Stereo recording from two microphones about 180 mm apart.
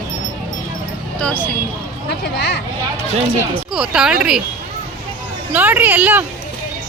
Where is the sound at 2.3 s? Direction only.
65° left (ahead or behind).